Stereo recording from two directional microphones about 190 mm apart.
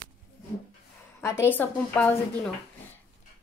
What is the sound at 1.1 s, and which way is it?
Speech, 15° left (ahead or behind).